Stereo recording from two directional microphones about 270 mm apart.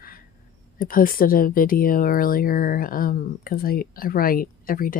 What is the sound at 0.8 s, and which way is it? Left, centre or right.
Speech, left.